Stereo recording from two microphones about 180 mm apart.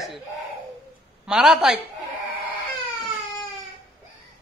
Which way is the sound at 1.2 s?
5° right (ahead or behind).